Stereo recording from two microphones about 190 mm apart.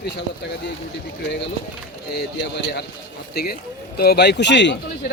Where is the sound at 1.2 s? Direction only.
65° left (ahead or behind).